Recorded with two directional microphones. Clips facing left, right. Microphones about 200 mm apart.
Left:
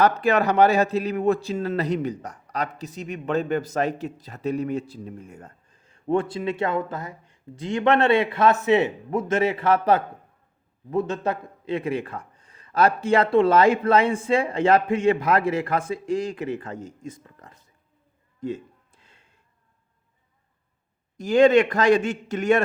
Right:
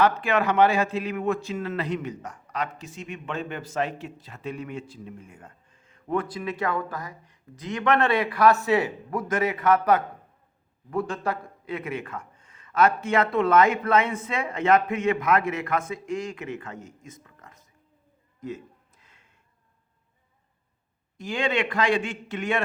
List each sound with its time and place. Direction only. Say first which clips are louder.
0.0 s a man's voice: left 3 dB; 40° left (ahead or behind)
18.3 s a sound: left 5 dB; 30° left (ahead or behind)
21.2 s a man's voice: left 11 dB; 40° left (ahead or behind)